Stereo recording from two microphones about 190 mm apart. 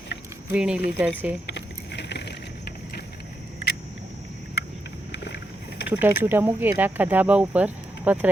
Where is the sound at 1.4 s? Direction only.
65° left (ahead or behind).